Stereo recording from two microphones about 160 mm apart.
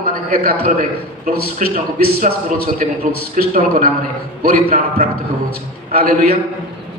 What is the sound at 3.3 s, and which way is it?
A man's voice, 60° right (ahead or behind).